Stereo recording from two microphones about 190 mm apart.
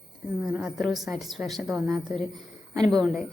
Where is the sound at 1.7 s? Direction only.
15° right (ahead or behind).